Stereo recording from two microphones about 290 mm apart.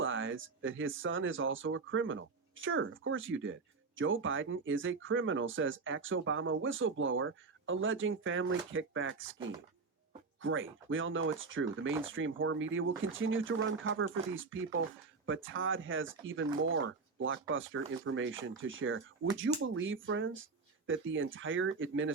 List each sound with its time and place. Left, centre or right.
0.0 s speech: right